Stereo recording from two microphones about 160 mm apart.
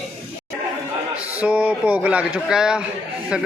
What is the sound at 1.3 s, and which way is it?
A man's voice, 10° right (ahead or behind).